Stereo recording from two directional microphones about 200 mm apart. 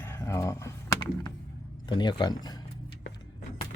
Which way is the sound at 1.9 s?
20° left (ahead or behind).